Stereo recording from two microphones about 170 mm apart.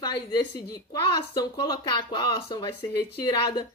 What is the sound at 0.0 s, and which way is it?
Speech, 25° left (ahead or behind).